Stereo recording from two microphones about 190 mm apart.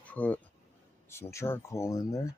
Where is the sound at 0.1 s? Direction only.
10° left (ahead or behind).